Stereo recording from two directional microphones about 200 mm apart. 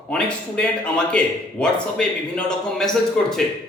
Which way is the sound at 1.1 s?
5° left (ahead or behind).